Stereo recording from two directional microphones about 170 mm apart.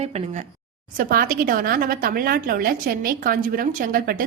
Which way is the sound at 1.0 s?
60° right (ahead or behind).